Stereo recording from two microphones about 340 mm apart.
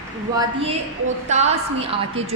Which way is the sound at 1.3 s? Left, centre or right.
Centre.